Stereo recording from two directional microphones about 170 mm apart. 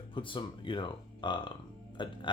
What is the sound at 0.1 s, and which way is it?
Speech, 30° left (ahead or behind).